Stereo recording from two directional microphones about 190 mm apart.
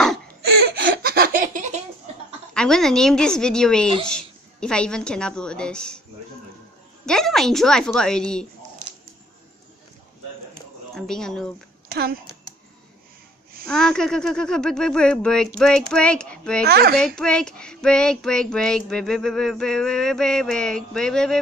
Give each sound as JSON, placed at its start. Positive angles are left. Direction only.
{"t": 0.8, "sound": "laughter", "side_deg": -55}
{"t": 2.5, "sound": "a woman's voice", "side_deg": 5}
{"t": 7.1, "sound": "speech", "side_deg": 0}
{"t": 11.0, "sound": "speech", "side_deg": 5}
{"t": 11.9, "sound": "speech", "side_deg": -55}
{"t": 13.7, "sound": "speech", "side_deg": 5}
{"t": 16.6, "sound": "speech", "side_deg": -55}
{"t": 17.0, "sound": "speech", "side_deg": 5}